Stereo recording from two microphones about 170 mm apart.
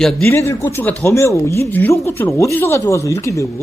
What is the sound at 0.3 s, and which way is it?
Speech, 15° left (ahead or behind).